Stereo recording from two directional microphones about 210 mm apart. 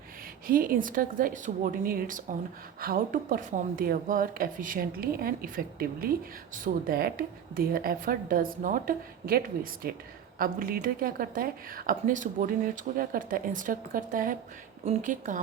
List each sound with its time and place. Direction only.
0.4 s a woman's voice: 40° right (ahead or behind)